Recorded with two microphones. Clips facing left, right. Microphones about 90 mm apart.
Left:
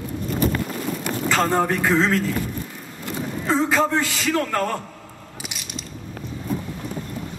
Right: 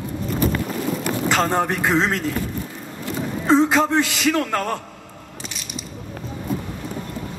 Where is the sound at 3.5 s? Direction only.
20° right (ahead or behind).